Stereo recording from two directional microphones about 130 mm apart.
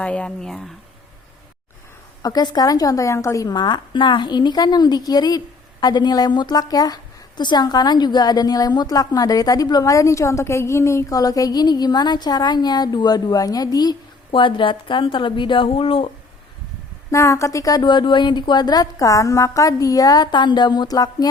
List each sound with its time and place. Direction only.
0.0 s speech: 10° left (ahead or behind)
2.2 s a woman's voice: 30° left (ahead or behind)
17.1 s a woman's voice: 20° left (ahead or behind)